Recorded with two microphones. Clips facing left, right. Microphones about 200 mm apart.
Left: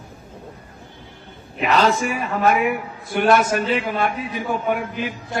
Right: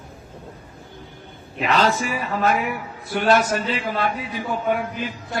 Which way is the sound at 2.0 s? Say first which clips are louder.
Left 2 dB; 60° left (ahead or behind).